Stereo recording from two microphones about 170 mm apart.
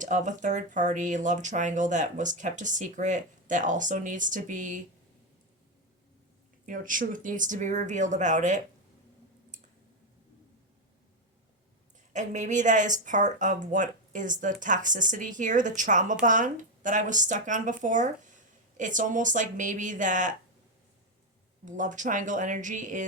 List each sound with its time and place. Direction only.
0.0 s speech: 45° right (ahead or behind)
6.7 s speech: 50° right (ahead or behind)
12.1 s speech: 45° right (ahead or behind)
21.6 s speech: 50° right (ahead or behind)